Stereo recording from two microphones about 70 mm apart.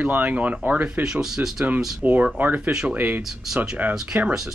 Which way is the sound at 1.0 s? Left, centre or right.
Centre.